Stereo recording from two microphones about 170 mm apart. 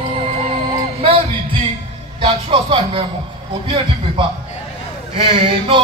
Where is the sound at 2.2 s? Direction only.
30° right (ahead or behind).